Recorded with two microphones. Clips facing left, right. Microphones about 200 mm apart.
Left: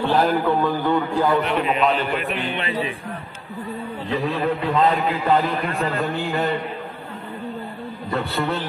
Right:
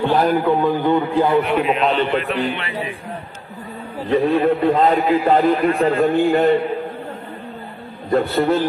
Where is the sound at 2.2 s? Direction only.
20° left (ahead or behind).